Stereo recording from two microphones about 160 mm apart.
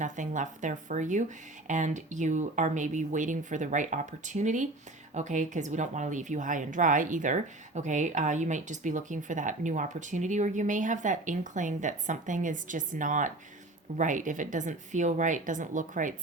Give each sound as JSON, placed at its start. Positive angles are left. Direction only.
{"t": 0.0, "sound": "speech", "side_deg": -50}